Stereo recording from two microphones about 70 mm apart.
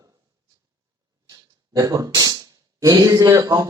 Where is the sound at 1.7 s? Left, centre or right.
Right.